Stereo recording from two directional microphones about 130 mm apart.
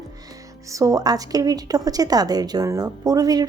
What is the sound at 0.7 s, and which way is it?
A woman's voice, 25° right (ahead or behind).